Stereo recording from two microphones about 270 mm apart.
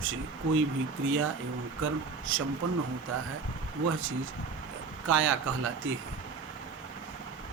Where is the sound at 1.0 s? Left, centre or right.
Right.